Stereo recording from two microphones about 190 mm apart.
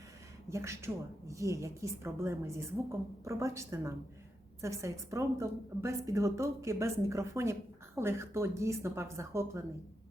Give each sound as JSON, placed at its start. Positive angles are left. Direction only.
{"t": 0.5, "sound": "a woman's voice", "side_deg": -15}